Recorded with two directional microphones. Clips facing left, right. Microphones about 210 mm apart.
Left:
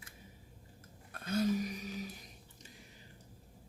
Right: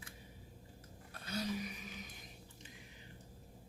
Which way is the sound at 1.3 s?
45° left (ahead or behind).